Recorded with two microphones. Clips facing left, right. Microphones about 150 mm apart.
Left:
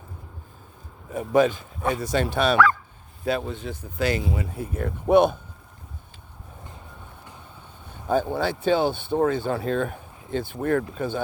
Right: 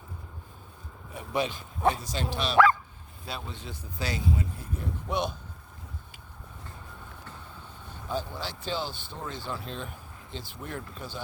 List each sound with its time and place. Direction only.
1.1 s speech: 45° left (ahead or behind)
2.0 s speech: 60° left (ahead or behind)
8.0 s speech: 55° left (ahead or behind)